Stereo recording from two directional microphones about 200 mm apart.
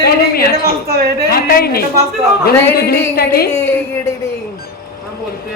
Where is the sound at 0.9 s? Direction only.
50° right (ahead or behind).